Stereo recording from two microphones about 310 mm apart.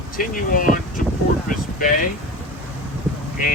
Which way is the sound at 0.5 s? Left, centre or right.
Left.